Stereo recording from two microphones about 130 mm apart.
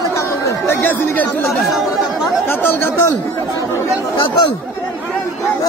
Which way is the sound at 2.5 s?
15° left (ahead or behind).